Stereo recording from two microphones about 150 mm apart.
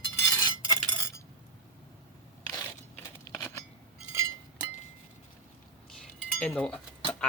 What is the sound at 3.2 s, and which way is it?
Scissors, 20° left (ahead or behind).